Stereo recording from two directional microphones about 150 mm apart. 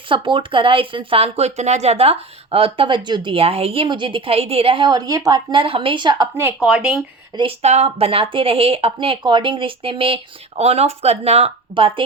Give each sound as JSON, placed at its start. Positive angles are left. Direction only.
{"t": 0.1, "sound": "speech", "side_deg": -35}
{"t": 6.6, "sound": "speech", "side_deg": -5}
{"t": 7.6, "sound": "speech", "side_deg": -45}